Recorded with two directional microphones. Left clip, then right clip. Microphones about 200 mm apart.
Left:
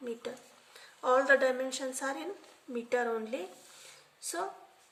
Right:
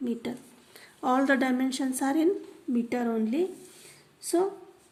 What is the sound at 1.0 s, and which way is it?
Speech, 30° right (ahead or behind).